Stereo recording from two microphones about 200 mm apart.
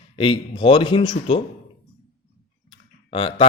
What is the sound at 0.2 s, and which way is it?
A man's voice, 25° left (ahead or behind).